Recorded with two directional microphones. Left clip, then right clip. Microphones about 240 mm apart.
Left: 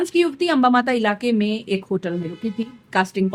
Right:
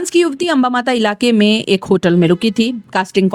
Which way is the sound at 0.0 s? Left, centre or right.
Right.